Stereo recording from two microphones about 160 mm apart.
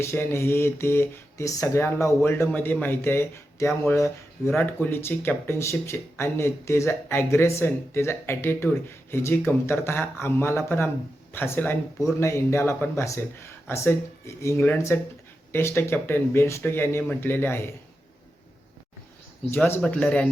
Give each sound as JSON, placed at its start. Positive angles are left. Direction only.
{"t": 0.0, "sound": "speech", "side_deg": 15}
{"t": 19.5, "sound": "speech", "side_deg": 15}